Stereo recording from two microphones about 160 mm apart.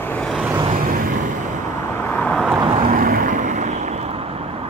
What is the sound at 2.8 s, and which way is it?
Vehicle, 60° right (ahead or behind).